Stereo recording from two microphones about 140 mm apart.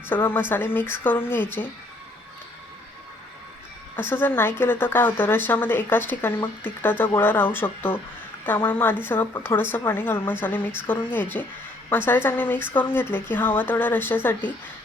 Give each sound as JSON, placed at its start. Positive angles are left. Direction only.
{"t": 0.1, "sound": "speech", "side_deg": 15}
{"t": 4.1, "sound": "speech", "side_deg": 15}